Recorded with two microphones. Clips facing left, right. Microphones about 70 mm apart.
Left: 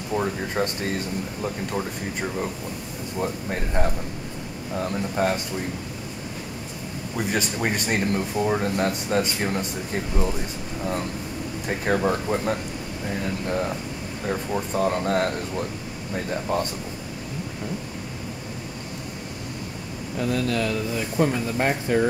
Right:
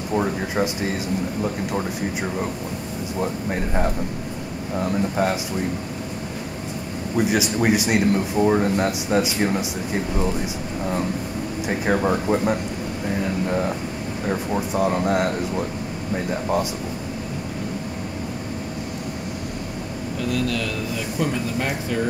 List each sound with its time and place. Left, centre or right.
0.1 s speech: centre
7.2 s speech: centre
20.2 s speech: left